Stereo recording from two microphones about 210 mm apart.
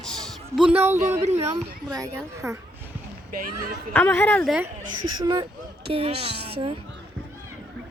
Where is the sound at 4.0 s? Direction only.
10° left (ahead or behind).